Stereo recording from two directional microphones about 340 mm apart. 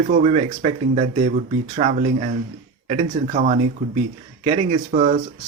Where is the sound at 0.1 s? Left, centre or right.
Centre.